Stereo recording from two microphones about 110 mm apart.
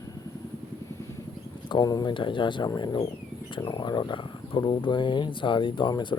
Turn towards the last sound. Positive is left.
turn(degrees=45)  # may be behind; listen again after turning